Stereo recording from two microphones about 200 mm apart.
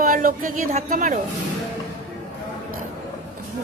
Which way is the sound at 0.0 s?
45° right (ahead or behind).